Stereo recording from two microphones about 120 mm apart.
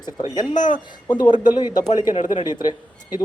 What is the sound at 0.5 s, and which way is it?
Speech, 90° left.